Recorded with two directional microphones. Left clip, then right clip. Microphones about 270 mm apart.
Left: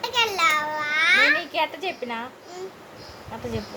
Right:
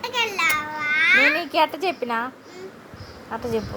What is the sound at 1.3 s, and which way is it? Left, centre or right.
Speech, right.